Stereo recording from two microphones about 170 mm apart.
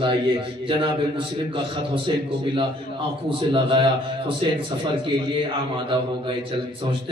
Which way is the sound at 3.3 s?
30° right (ahead or behind).